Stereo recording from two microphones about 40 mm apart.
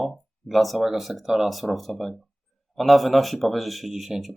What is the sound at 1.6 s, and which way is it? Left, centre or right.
Speech, centre.